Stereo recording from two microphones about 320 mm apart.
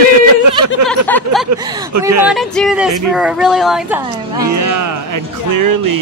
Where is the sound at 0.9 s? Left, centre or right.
Centre.